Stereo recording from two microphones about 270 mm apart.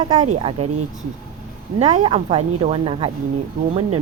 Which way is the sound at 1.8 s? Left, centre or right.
Centre.